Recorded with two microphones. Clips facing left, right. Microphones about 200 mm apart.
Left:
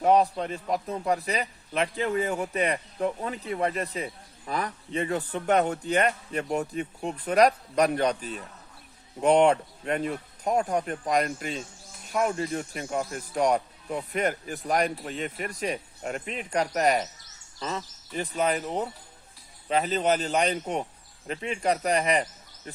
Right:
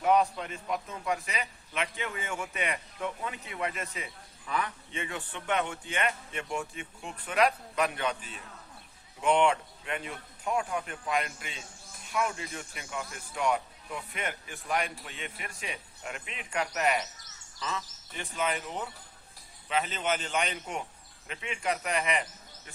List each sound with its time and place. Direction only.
0.0 s a man's voice: 35° left (ahead or behind)